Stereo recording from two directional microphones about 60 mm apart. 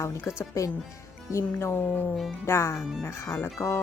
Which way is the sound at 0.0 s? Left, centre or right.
Left.